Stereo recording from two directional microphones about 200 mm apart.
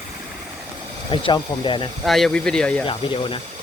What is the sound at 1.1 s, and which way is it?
Speech, 25° left (ahead or behind).